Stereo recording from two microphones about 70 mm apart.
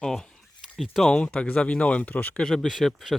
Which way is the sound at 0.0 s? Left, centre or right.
Centre.